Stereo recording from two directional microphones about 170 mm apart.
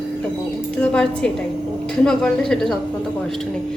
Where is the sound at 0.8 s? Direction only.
5° left (ahead or behind).